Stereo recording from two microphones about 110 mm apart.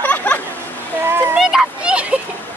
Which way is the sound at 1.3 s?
5° right (ahead or behind).